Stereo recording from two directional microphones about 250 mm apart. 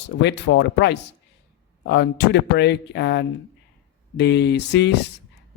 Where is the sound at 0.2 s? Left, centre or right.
Left.